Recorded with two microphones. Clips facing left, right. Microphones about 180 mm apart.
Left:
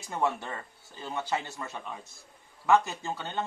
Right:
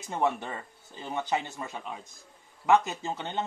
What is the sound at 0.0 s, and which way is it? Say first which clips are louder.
A man's voice: right 1 dB; 20° right (ahead or behind).